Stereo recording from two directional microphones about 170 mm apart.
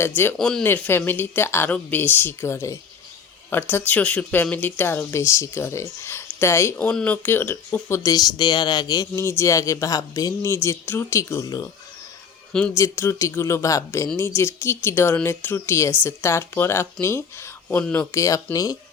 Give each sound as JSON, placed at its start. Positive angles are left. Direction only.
{"t": 0.2, "sound": "speech", "side_deg": 10}
{"t": 12.7, "sound": "speech", "side_deg": 15}